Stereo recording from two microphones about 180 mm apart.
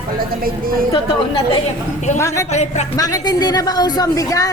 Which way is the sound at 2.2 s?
15° left (ahead or behind).